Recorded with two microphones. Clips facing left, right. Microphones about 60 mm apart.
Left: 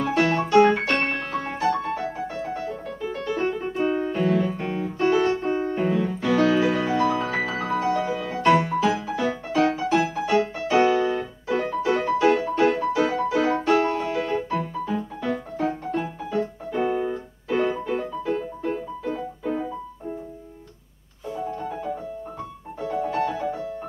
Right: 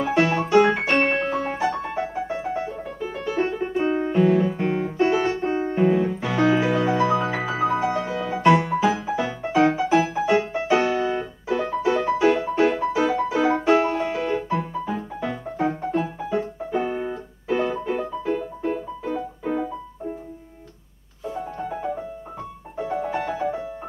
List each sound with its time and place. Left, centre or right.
0.1 s music: centre
3.0 s piano: centre
5.0 s music: centre
5.8 s piano: centre
7.1 s music: centre
10.9 s keyboard: centre
12.0 s music: centre
16.3 s keyboard: centre
17.8 s music: centre
22.8 s music: right